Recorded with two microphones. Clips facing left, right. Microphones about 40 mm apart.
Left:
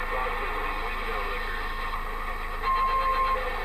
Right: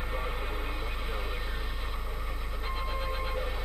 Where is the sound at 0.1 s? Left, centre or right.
Left.